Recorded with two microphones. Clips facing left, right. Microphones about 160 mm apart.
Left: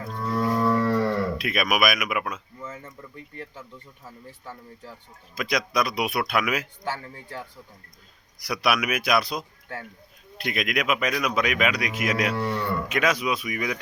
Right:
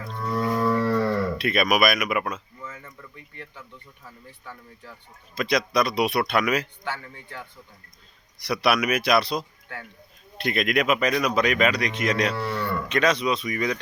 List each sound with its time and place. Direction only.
0.1 s whale vocalization: 5° left (ahead or behind)
0.9 s speech: centre (ahead or behind)
2.6 s speech: 25° left (ahead or behind)
5.3 s speech: centre (ahead or behind)
6.8 s speech: 40° left (ahead or behind)
8.4 s speech: centre (ahead or behind)